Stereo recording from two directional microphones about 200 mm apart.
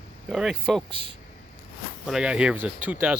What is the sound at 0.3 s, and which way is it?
Speech, 5° right (ahead or behind).